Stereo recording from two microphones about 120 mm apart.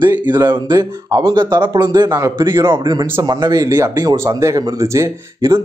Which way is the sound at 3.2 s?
35° right (ahead or behind).